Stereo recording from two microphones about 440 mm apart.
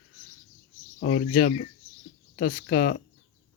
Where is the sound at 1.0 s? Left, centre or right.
Left.